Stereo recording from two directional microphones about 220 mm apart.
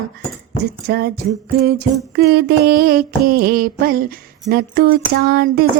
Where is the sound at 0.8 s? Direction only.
45° right (ahead or behind).